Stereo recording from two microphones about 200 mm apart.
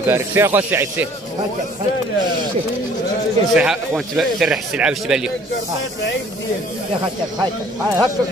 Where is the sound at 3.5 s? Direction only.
5° right (ahead or behind).